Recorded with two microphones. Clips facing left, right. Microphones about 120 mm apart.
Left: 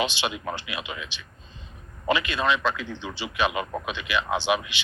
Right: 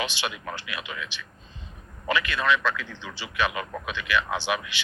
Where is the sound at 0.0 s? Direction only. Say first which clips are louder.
Left 4 dB; 20° left (ahead or behind).